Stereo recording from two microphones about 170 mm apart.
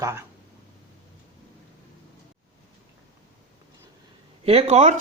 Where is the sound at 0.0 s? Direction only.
15° right (ahead or behind).